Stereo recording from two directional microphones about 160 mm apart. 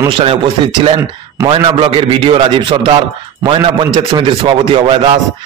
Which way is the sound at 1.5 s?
35° right (ahead or behind).